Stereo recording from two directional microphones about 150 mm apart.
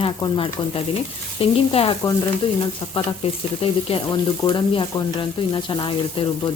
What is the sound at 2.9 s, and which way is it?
A woman's voice, 40° left (ahead or behind).